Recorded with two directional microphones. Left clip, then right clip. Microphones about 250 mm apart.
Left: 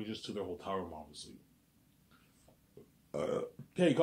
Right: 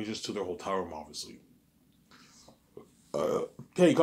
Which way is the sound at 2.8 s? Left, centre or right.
Right.